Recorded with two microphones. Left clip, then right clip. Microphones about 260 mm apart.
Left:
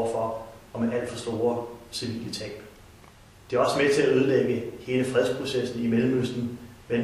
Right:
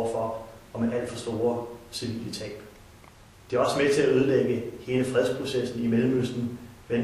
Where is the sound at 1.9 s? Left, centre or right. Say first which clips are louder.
Left 1 dB; centre.